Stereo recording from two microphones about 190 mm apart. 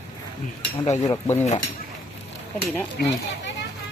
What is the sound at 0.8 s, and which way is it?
Speech, 35° left (ahead or behind).